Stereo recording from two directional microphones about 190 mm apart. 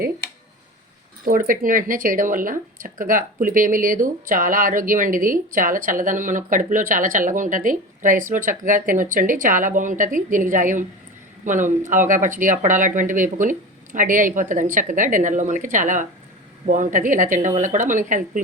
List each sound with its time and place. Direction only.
1.2 s speech: 45° right (ahead or behind)